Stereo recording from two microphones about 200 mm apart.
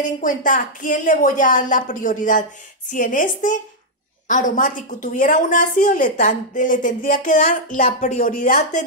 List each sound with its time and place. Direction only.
0.0 s a woman's voice: 40° left (ahead or behind)